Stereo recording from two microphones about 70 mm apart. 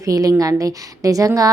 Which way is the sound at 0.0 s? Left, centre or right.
Right.